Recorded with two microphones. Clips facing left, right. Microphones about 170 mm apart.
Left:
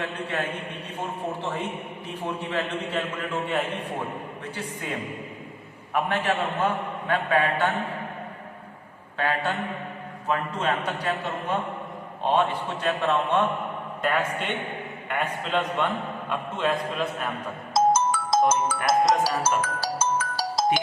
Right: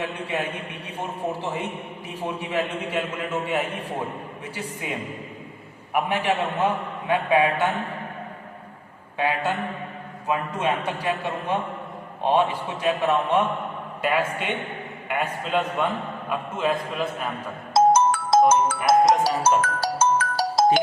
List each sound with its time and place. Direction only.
0.0 s a man's voice: 10° right (ahead or behind)
2.2 s a man's voice: 10° right (ahead or behind)
9.1 s a man's voice: 15° right (ahead or behind)
17.7 s ringtone: 60° right (ahead or behind)
18.9 s music: 60° right (ahead or behind)